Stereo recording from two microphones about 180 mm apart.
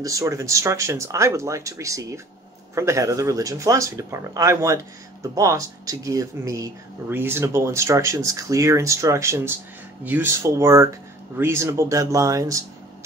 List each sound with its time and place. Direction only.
0.0 s speech: 20° right (ahead or behind)